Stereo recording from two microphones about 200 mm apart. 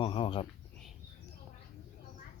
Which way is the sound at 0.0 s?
25° left (ahead or behind).